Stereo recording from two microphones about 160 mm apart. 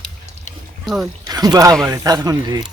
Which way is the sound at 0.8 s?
Centre (ahead or behind).